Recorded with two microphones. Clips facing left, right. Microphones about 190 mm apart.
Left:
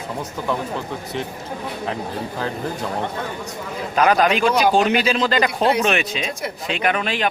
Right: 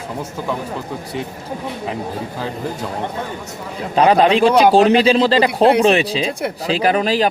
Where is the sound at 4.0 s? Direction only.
30° right (ahead or behind).